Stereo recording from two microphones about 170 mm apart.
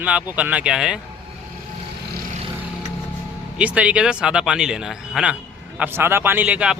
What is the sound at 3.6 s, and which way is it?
A man's voice, 5° right (ahead or behind).